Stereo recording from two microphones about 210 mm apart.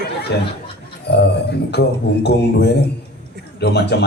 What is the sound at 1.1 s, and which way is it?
A man's voice, 50° left (ahead or behind).